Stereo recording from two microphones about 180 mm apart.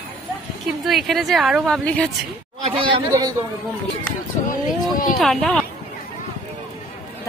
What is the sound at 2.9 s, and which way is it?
Speech, 20° right (ahead or behind).